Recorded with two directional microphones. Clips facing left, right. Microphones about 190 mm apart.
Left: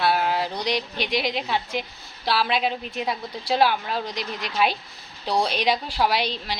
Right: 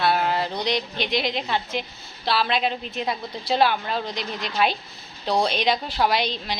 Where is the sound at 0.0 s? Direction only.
10° left (ahead or behind).